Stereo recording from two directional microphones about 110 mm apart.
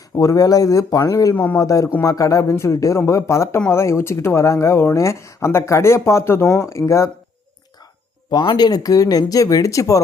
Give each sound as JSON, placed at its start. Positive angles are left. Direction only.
{"t": 0.2, "sound": "speech", "side_deg": 30}
{"t": 8.3, "sound": "speech", "side_deg": 40}